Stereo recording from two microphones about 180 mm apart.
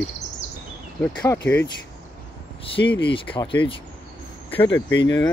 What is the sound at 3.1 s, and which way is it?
Speech, 30° left (ahead or behind).